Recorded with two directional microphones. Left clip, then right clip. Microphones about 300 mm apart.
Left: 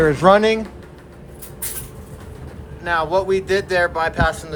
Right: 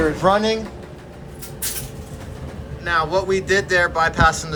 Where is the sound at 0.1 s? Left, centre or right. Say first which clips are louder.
Left 4 dB; left.